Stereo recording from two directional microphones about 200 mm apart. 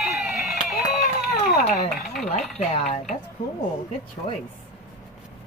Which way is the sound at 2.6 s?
35° left (ahead or behind).